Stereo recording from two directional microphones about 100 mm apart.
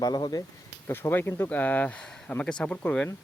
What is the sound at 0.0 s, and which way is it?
Speech, 40° left (ahead or behind).